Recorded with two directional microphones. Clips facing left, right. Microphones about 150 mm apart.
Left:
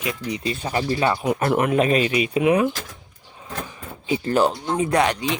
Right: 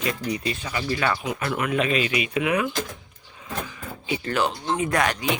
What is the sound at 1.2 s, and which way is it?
Speech, 40° left (ahead or behind).